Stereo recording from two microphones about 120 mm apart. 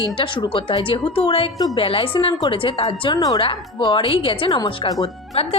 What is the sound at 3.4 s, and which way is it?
A woman's voice, 45° left (ahead or behind).